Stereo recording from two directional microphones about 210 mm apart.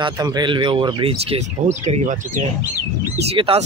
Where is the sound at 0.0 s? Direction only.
20° right (ahead or behind).